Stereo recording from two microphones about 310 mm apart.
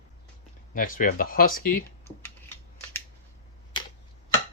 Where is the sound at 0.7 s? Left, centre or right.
Left.